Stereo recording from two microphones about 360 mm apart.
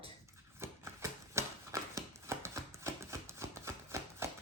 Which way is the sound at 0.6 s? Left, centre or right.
Centre.